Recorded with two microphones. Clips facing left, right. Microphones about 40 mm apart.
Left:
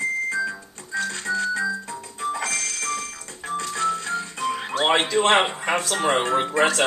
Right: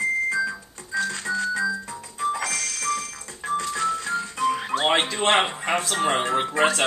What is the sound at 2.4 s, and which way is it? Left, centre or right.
Music, left.